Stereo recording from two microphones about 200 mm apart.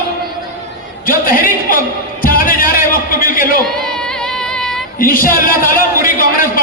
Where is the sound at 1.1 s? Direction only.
45° left (ahead or behind).